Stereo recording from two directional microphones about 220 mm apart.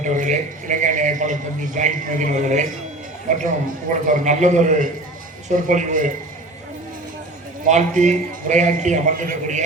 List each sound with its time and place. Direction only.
0.0 s a man's voice: 35° right (ahead or behind)
7.7 s a man's voice: 35° right (ahead or behind)